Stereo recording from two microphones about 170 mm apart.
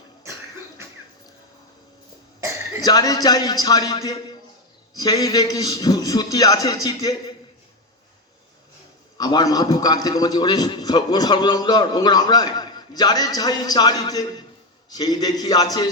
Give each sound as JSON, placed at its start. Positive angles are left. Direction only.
{"t": 2.8, "sound": "a man's voice", "side_deg": 20}
{"t": 9.1, "sound": "a man's voice", "side_deg": 25}